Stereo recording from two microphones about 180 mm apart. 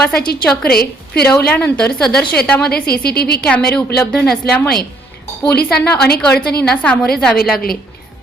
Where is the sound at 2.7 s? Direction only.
60° left (ahead or behind).